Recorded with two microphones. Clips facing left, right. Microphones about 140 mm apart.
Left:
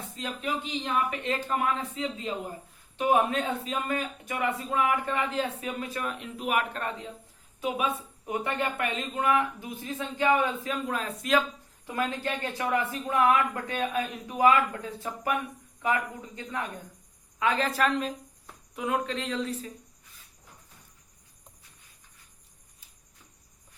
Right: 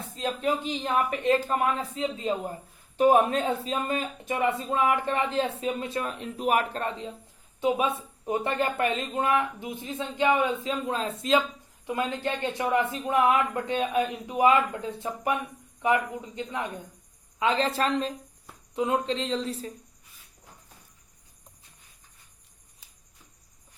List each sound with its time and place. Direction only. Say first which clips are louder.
0.2 s speech: right 5 dB; 35° right (ahead or behind)